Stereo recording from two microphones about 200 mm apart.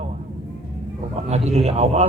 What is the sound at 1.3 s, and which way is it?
Speech, 35° right (ahead or behind).